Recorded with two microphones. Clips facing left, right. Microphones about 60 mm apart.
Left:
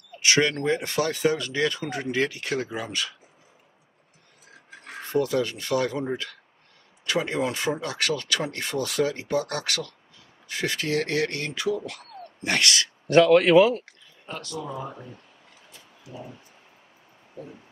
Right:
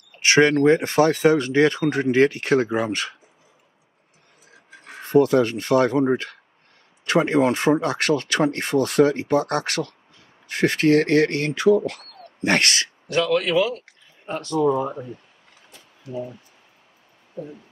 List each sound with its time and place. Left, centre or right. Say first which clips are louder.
0.2 s speech: right 7 dB; right
5.0 s speech: right 8 dB; right
13.1 s speech: left 5 dB; left
14.2 s speech: right 9 dB; right
14.6 s speech: right 17 dB; right